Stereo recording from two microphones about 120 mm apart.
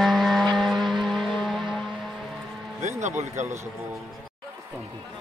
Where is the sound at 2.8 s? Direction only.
80° right.